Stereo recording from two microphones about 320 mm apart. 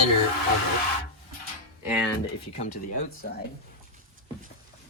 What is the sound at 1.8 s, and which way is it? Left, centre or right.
Speech, centre.